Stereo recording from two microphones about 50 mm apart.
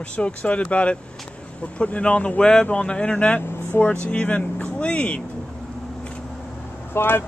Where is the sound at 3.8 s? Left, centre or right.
Left.